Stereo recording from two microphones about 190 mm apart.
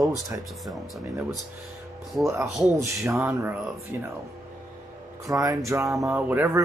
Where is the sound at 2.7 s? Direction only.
15° right (ahead or behind).